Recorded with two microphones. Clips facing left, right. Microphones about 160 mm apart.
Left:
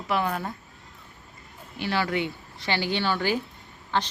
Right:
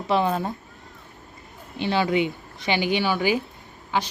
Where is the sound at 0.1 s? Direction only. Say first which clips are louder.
Right 5 dB; 25° right (ahead or behind).